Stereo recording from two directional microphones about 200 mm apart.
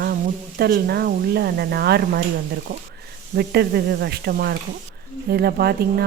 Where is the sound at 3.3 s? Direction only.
55° right (ahead or behind).